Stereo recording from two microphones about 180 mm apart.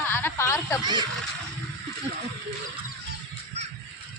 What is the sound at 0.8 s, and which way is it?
Speech, 25° right (ahead or behind).